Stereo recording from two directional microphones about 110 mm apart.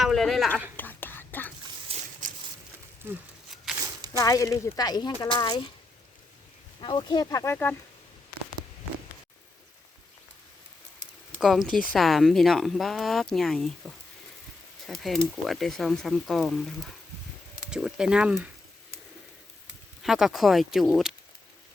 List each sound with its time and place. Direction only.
0.0 s a woman's voice: centre (ahead or behind)
0.8 s whispering: 15° left (ahead or behind)
4.2 s speech: 30° left (ahead or behind)
6.8 s speech: 45° left (ahead or behind); by 7.8 s 20° left (ahead or behind)
11.3 s speech: 5° right (ahead or behind)
20.0 s speech: 5° right (ahead or behind)